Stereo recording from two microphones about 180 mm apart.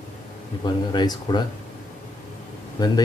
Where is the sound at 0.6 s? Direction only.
25° left (ahead or behind).